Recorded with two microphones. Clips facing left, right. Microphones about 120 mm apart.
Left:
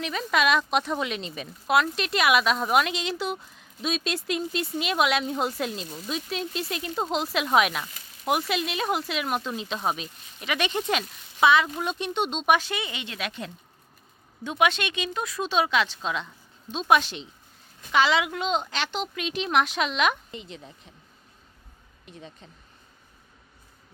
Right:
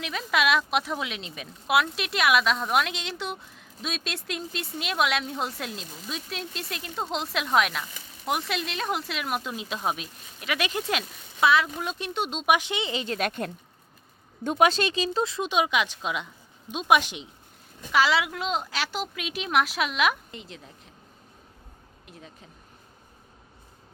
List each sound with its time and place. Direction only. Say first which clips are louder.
0.0 s speech: left 1 dB; centre (ahead or behind)
12.5 s a woman's voice: right 1 dB; 20° right (ahead or behind); by 20.9 s centre (ahead or behind)
22.0 s speech: left 3 dB; 5° right (ahead or behind)